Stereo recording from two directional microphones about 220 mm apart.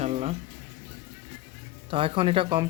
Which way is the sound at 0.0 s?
30° right (ahead or behind).